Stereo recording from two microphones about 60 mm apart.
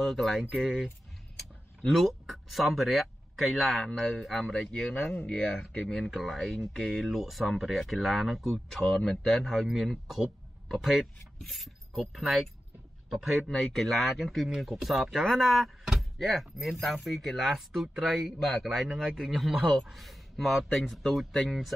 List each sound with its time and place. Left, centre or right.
0.0 s a man's voice: centre
1.9 s speech: centre
5.9 s a man's voice: centre
11.3 s filing: centre
13.1 s a man's voice: centre
13.5 s a man's voice: centre